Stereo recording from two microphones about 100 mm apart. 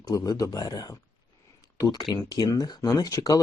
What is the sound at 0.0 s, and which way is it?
Speech, 35° left (ahead or behind).